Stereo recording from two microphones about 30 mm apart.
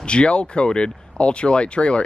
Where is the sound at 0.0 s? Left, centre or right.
Left.